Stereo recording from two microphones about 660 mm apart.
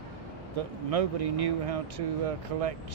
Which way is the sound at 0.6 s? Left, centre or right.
Right.